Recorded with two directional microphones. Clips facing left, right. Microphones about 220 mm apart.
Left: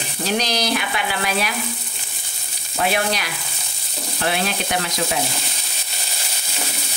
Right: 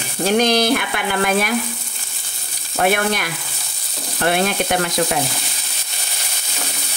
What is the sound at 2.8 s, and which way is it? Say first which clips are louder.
Sizzle: right 4 dB; 55° right (ahead or behind).